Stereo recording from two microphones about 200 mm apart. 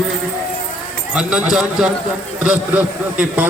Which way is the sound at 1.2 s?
5° right (ahead or behind).